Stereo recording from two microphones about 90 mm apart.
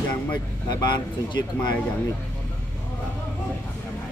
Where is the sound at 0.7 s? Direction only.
50° left (ahead or behind).